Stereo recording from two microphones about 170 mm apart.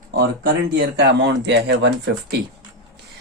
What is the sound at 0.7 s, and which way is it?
Speech, 85° right.